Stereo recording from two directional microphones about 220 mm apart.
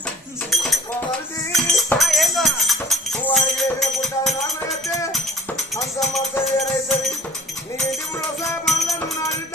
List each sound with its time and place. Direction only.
0.5 s a sound: centre (ahead or behind)
1.5 s music: centre (ahead or behind)
5.7 s music: centre (ahead or behind)
8.6 s music: centre (ahead or behind)